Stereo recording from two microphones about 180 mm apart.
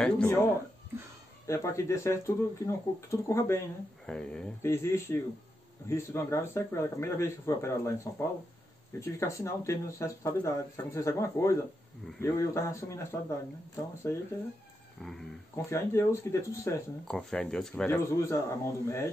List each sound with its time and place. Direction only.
0.0 s speech: 5° left (ahead or behind)
1.5 s speech: 15° left (ahead or behind)
4.0 s speech: 5° left (ahead or behind)
4.6 s speech: 15° left (ahead or behind)
15.0 s speech: centre (ahead or behind)
15.5 s speech: 15° left (ahead or behind)
17.1 s speech: 5° left (ahead or behind)
17.8 s speech: 15° left (ahead or behind)